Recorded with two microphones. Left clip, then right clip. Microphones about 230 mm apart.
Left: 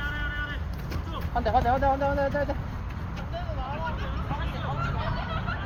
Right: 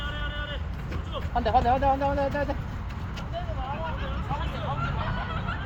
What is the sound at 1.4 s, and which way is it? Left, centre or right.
Speech, right.